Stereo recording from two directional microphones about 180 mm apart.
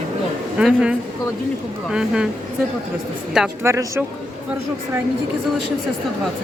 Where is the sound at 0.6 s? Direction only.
5° right (ahead or behind).